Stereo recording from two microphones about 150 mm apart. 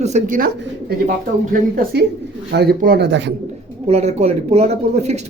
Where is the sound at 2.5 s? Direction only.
90° right.